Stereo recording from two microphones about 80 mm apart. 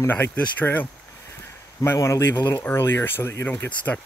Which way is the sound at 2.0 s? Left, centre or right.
Left.